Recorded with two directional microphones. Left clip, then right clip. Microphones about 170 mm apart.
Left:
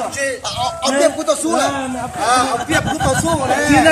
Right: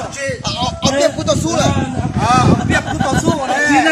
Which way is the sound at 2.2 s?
40° left (ahead or behind).